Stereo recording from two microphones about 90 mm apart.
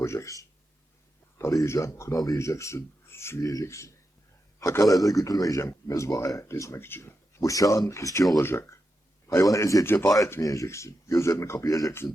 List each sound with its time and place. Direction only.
0.0 s speech: 30° left (ahead or behind)
10.1 s speech: 40° left (ahead or behind)